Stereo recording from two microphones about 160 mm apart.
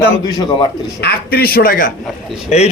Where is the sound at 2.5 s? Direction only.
45° left (ahead or behind).